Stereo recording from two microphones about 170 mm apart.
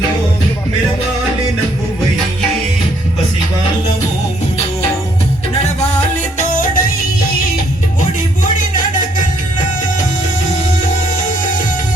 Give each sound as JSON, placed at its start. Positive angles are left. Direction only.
{"t": 6.4, "sound": "music", "side_deg": 50}